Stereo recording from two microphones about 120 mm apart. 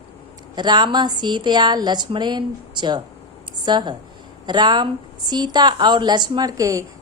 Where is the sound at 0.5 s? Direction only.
40° right (ahead or behind).